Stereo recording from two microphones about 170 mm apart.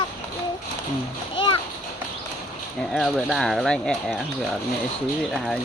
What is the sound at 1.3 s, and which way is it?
Splash, 30° left (ahead or behind).